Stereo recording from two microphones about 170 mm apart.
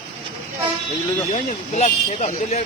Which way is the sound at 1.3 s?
40° left (ahead or behind).